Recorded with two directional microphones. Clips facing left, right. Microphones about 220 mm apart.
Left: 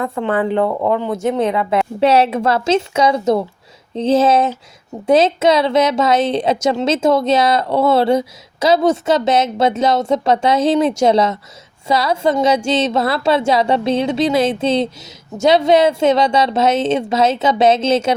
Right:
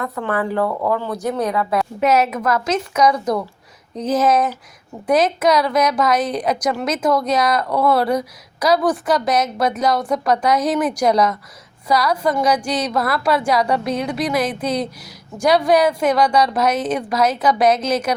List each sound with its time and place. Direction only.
0.0 s a woman's voice: 25° left (ahead or behind)